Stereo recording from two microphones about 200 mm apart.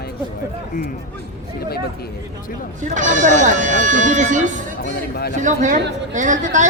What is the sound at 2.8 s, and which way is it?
Speech, 40° right (ahead or behind).